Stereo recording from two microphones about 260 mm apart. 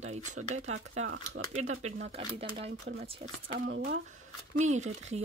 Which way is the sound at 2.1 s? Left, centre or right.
Right.